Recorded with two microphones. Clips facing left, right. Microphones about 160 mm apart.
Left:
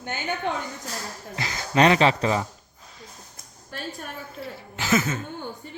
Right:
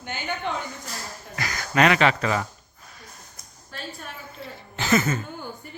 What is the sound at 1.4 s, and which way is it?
Speech, 25° left (ahead or behind).